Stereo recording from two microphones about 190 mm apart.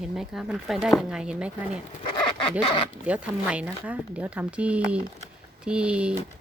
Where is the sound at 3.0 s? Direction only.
5° right (ahead or behind).